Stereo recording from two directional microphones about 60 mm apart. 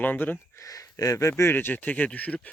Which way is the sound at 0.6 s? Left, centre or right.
Left.